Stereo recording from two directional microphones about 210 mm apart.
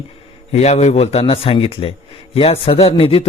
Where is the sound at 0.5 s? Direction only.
30° left (ahead or behind).